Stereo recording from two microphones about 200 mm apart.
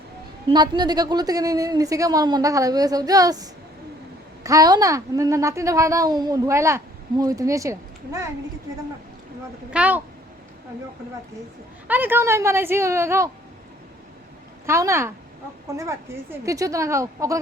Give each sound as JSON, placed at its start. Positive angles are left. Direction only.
{"t": 0.5, "sound": "a woman's voice", "side_deg": -20}
{"t": 9.7, "sound": "a woman's voice", "side_deg": -5}
{"t": 11.9, "sound": "a woman's voice", "side_deg": -10}
{"t": 14.7, "sound": "a woman's voice", "side_deg": -15}